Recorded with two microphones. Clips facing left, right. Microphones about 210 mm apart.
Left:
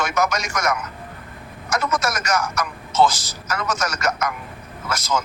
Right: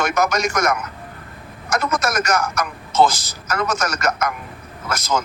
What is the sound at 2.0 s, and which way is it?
A man's voice, 60° right (ahead or behind).